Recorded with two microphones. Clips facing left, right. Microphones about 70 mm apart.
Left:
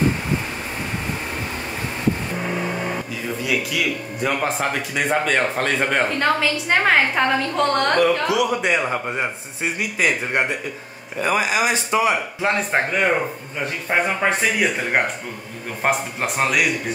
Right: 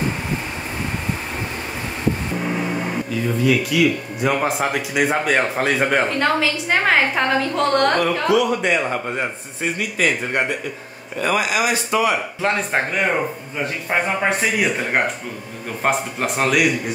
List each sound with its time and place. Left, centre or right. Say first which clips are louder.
3.4 s speech: right 6 dB; centre; by 12.2 s left
12.4 s speech: even; centre
15.8 s speech: right 1 dB; centre